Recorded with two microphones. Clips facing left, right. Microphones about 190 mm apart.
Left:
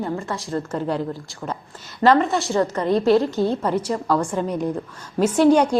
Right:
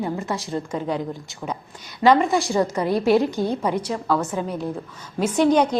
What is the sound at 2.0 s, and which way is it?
A woman's voice, 10° right (ahead or behind).